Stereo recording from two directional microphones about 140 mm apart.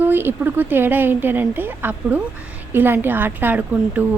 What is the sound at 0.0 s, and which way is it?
A woman's voice, 15° right (ahead or behind).